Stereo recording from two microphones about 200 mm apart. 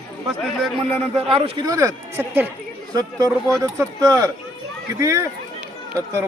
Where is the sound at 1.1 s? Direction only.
30° right (ahead or behind).